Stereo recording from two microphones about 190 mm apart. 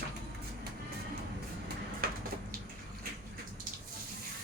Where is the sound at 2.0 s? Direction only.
50° right (ahead or behind).